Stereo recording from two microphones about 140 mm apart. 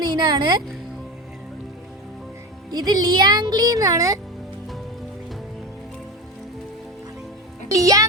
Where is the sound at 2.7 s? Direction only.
30° right (ahead or behind).